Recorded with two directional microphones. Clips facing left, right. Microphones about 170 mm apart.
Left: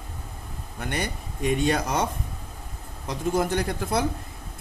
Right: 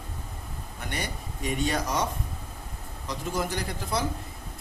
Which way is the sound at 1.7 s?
55° left (ahead or behind).